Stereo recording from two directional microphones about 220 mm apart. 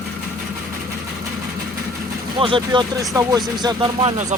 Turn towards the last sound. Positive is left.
turn(degrees=-25)  # may be behind; listen again after turning